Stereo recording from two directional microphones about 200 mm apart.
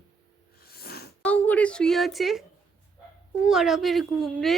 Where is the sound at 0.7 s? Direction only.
50° left (ahead or behind).